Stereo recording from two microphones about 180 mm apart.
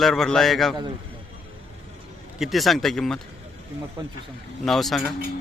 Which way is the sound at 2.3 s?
Centre (ahead or behind).